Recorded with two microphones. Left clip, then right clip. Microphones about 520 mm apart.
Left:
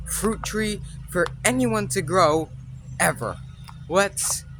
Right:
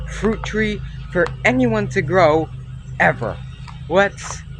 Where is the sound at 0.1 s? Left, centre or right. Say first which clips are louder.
Right 5 dB; left.